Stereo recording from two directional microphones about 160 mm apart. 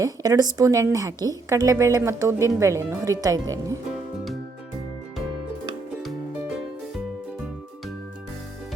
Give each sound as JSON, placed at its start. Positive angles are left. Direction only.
{"t": 0.0, "sound": "a woman's voice", "side_deg": -20}